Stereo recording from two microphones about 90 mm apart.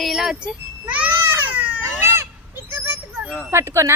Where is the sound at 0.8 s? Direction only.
15° right (ahead or behind).